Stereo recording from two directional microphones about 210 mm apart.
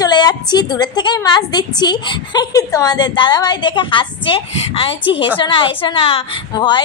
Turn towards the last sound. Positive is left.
turn(degrees=20)  # may be behind; listen again after turning